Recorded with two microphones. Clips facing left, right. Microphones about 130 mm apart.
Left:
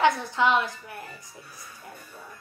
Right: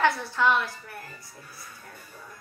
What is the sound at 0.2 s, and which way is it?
Speech, 20° left (ahead or behind).